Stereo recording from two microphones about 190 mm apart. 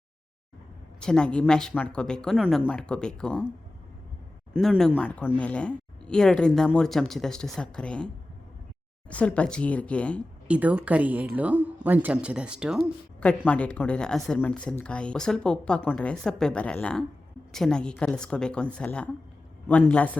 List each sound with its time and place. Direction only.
0.9 s speech: 5° left (ahead or behind)
4.6 s a woman's voice: centre (ahead or behind)
9.0 s a woman's voice: 5° left (ahead or behind)
10.5 s speech: 5° right (ahead or behind)
13.1 s speech: 5° left (ahead or behind)